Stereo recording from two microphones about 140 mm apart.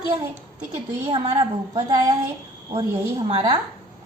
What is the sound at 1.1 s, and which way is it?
A woman's voice, 35° right (ahead or behind).